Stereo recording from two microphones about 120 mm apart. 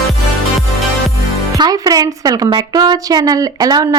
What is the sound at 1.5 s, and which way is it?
A woman's voice, 30° right (ahead or behind).